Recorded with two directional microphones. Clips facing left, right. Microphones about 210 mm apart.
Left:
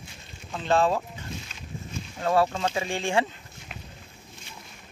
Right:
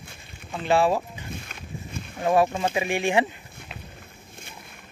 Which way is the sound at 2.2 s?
15° right (ahead or behind).